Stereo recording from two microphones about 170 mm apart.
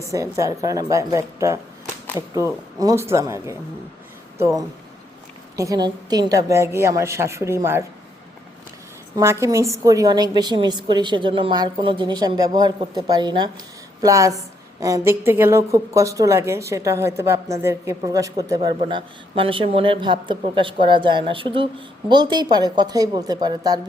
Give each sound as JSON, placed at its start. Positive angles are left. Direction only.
{"t": 0.0, "sound": "a woman's voice", "side_deg": -20}
{"t": 9.1, "sound": "a woman's voice", "side_deg": -15}